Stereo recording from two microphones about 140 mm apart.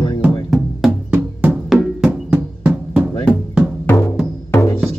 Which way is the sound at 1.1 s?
10° right (ahead or behind).